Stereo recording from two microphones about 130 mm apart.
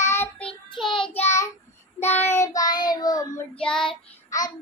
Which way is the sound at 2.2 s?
20° left (ahead or behind).